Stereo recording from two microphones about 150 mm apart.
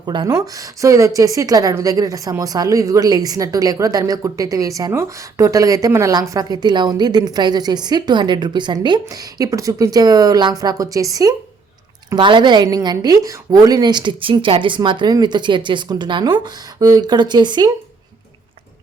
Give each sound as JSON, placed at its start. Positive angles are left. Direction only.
{"t": 0.0, "sound": "a woman's voice", "side_deg": -30}